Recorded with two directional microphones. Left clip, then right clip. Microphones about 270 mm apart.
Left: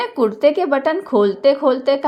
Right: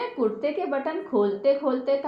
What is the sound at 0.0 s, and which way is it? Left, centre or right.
A woman's voice, left.